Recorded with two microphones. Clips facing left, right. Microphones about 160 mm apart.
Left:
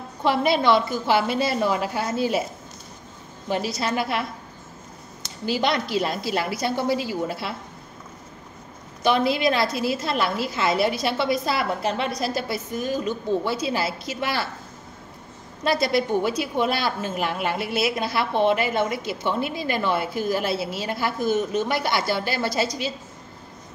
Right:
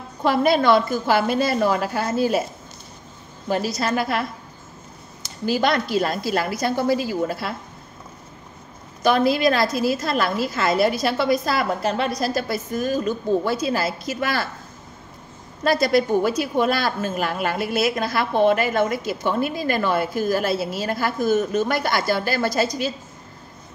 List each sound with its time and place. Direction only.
0.2 s a woman's voice: 45° right (ahead or behind)
1.7 s a woman's voice: 15° left (ahead or behind)
3.6 s a woman's voice: 45° right (ahead or behind)
5.4 s a woman's voice: 45° right (ahead or behind)
9.0 s a woman's voice: 45° right (ahead or behind)
15.6 s a woman's voice: 45° right (ahead or behind)